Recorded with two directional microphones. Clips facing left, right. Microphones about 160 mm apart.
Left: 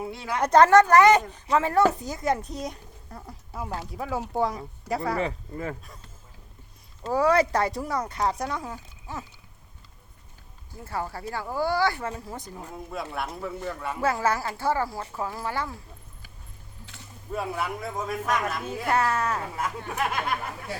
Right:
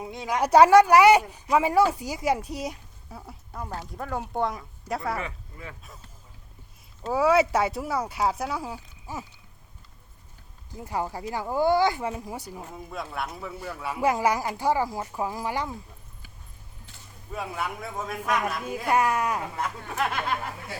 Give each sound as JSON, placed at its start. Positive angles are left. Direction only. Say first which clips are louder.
{"t": 0.0, "sound": "speech", "louder": "right 1 dB", "side_deg": -15}
{"t": 7.0, "sound": "speech", "louder": "even", "side_deg": -5}
{"t": 10.7, "sound": "speech", "louder": "right 2 dB", "side_deg": -15}
{"t": 17.3, "sound": "speech", "louder": "left 2 dB", "side_deg": 0}
{"t": 18.7, "sound": "speech", "louder": "right 2 dB", "side_deg": -10}